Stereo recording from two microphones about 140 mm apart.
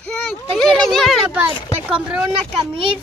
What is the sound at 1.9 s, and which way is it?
Speech, 10° right (ahead or behind).